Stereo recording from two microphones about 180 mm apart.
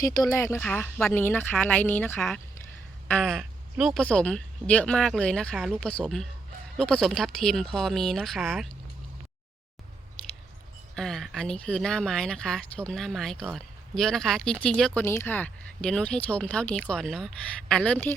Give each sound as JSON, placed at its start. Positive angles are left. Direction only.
{"t": 0.0, "sound": "speech", "side_deg": 20}
{"t": 10.9, "sound": "speech", "side_deg": 0}